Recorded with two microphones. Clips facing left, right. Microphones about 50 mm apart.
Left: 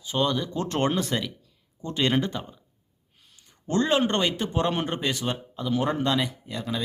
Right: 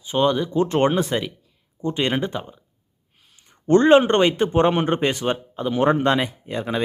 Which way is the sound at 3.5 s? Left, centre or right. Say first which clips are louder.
Right 10 dB; right.